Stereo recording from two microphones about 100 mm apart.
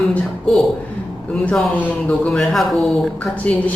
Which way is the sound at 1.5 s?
15° left (ahead or behind).